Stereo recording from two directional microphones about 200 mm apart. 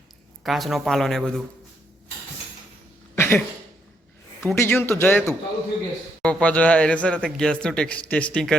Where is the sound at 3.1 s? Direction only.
10° left (ahead or behind).